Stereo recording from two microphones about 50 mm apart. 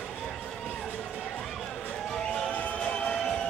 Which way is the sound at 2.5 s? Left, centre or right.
Left.